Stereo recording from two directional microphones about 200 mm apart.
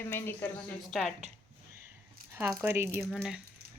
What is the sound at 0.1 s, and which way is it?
Speech, 10° left (ahead or behind).